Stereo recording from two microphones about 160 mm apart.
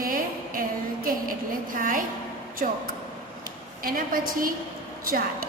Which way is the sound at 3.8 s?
65° right (ahead or behind).